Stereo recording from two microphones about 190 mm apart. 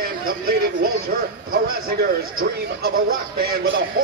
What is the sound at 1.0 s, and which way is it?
Speech, 50° right (ahead or behind).